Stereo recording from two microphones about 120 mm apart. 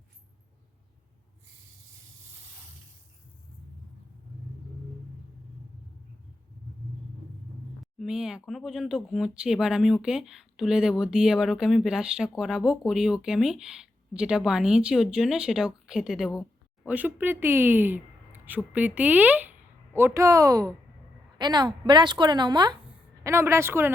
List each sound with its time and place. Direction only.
7.9 s speech: 5° right (ahead or behind)
16.8 s a woman's voice: 15° right (ahead or behind); by 22.8 s 35° right (ahead or behind)
23.2 s speech: 20° right (ahead or behind)